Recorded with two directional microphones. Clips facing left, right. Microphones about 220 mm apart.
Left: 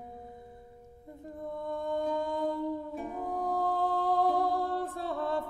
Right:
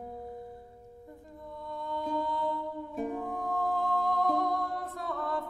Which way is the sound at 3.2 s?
35° left (ahead or behind).